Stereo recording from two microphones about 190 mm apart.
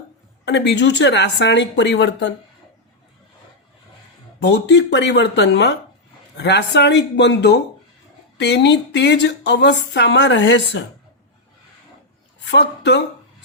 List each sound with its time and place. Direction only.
0.4 s speech: 65° left (ahead or behind)
4.4 s speech: 65° left (ahead or behind)
12.5 s speech: 65° left (ahead or behind)